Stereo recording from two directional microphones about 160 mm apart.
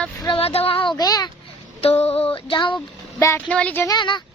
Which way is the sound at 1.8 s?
40° left (ahead or behind).